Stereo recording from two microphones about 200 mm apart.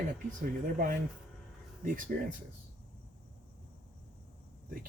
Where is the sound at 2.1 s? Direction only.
45° right (ahead or behind).